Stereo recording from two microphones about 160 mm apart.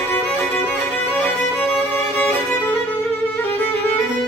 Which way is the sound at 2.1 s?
10° left (ahead or behind).